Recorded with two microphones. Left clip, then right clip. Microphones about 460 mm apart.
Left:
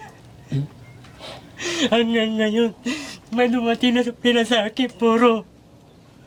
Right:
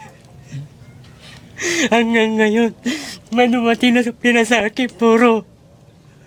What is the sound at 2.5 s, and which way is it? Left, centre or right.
Speech, right.